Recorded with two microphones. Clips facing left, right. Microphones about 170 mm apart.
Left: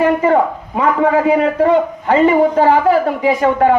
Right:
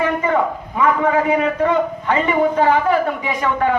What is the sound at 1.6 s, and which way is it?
Speech, 35° left (ahead or behind).